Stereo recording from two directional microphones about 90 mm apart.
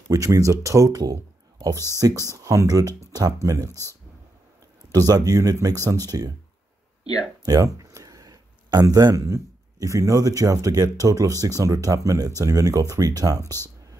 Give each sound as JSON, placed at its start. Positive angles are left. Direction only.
{"t": 0.1, "sound": "a man's voice", "side_deg": -40}
{"t": 4.9, "sound": "a man's voice", "side_deg": -45}
{"t": 7.4, "sound": "a sound", "side_deg": -40}
{"t": 8.8, "sound": "a man's voice", "side_deg": -40}